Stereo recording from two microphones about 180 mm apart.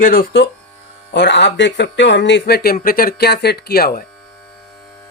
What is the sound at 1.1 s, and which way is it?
Speech, 75° left (ahead or behind).